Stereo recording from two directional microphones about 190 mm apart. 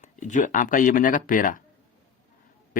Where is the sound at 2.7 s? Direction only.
45° left (ahead or behind).